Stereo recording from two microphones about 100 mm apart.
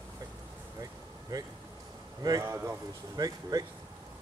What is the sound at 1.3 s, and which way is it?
Speech, 40° right (ahead or behind).